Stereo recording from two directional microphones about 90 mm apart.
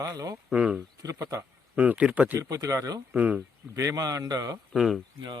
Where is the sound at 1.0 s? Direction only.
40° right (ahead or behind).